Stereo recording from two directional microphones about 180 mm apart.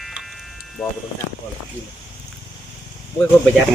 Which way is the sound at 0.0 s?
Centre (ahead or behind).